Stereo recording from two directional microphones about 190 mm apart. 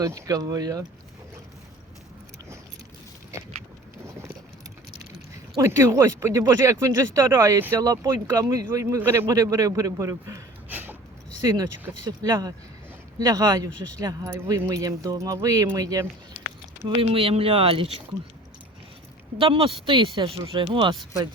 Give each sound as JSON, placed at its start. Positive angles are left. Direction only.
{"t": 0.0, "sound": "speech", "side_deg": -15}
{"t": 5.5, "sound": "a man's voice", "side_deg": -15}
{"t": 11.4, "sound": "speech", "side_deg": -20}
{"t": 16.8, "sound": "speech", "side_deg": -30}
{"t": 19.4, "sound": "speech", "side_deg": -30}